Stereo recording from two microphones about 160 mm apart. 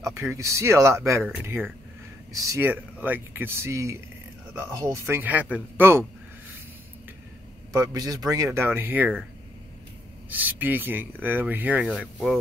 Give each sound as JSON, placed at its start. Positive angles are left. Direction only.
{"t": 0.0, "sound": "speech", "side_deg": -15}
{"t": 7.7, "sound": "speech", "side_deg": -25}
{"t": 10.3, "sound": "speech", "side_deg": -10}